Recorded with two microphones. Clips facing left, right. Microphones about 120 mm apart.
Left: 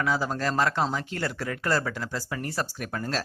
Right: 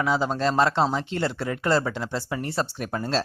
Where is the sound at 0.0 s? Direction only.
20° right (ahead or behind).